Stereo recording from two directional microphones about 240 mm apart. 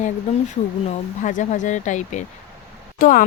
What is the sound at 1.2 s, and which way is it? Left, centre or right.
A woman's voice, left.